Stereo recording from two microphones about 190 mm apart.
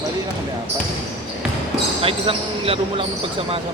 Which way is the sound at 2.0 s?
30° right (ahead or behind).